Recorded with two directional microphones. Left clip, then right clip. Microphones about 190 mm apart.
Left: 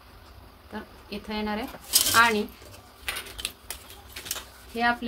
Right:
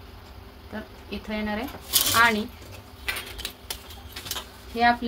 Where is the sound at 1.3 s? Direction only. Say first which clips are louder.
Right 1 dB; 25° left (ahead or behind).